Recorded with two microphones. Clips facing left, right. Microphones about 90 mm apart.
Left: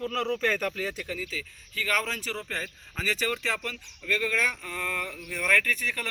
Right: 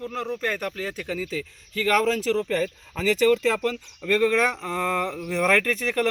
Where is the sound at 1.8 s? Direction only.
80° right.